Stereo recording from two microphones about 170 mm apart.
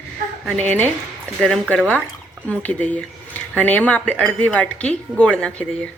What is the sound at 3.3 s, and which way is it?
Speech, 10° left (ahead or behind).